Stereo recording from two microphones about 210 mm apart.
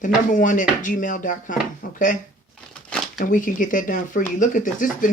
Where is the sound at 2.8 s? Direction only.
5° left (ahead or behind).